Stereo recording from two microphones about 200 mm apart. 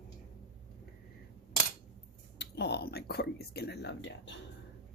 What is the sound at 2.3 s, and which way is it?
Speech, 55° left (ahead or behind).